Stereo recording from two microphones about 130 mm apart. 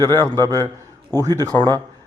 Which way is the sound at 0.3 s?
30° right (ahead or behind).